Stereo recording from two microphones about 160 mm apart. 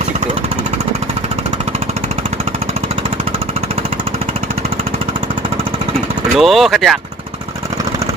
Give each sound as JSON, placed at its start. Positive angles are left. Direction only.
{"t": 6.3, "sound": "speech", "side_deg": 0}